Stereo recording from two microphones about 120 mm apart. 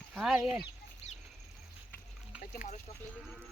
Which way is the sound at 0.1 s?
5° right (ahead or behind).